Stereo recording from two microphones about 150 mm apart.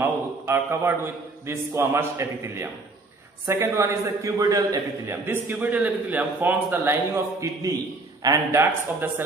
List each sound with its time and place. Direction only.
0.0 s a man's voice: 15° right (ahead or behind)